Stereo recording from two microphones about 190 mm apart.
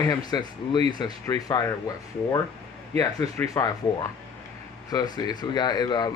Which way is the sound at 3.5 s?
20° left (ahead or behind).